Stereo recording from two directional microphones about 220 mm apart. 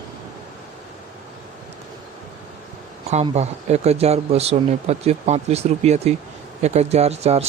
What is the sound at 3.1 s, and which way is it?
Speech, 30° right (ahead or behind).